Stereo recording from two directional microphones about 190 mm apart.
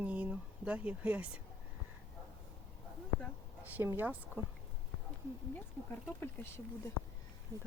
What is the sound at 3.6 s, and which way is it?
Speech, 10° right (ahead or behind).